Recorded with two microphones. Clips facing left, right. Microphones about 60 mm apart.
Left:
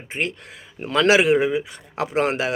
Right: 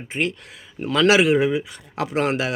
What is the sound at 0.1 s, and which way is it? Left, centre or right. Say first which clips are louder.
A man's voice: right 2 dB; left.